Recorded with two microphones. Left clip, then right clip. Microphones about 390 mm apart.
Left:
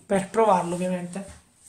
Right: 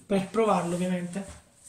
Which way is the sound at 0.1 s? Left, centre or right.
Centre.